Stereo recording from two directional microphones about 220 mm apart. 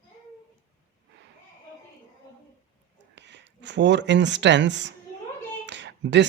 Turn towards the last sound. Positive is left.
turn(degrees=-55)  # may be behind; listen again after turning